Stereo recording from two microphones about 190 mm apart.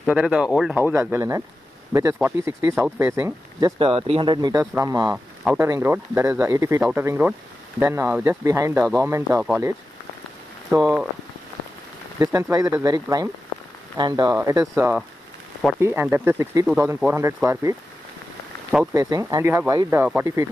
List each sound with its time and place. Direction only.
0.0 s speech: 5° right (ahead or behind)
3.7 s speech: 30° right (ahead or behind); by 9.5 s 15° right (ahead or behind)
10.7 s speech: 20° right (ahead or behind)
12.2 s speech: 15° right (ahead or behind)
18.9 s speech: 20° right (ahead or behind)